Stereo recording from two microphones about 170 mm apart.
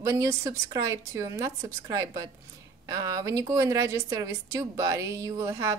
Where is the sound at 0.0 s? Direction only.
20° right (ahead or behind).